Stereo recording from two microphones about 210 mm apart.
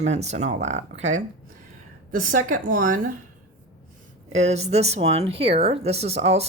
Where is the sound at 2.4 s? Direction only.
40° right (ahead or behind).